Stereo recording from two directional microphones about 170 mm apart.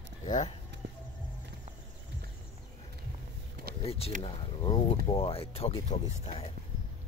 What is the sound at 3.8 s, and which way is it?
Speech, 35° left (ahead or behind).